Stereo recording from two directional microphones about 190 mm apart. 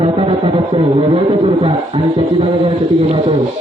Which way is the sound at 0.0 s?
30° right (ahead or behind).